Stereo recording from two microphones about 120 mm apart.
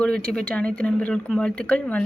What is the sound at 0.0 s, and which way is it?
A woman's voice, 10° left (ahead or behind).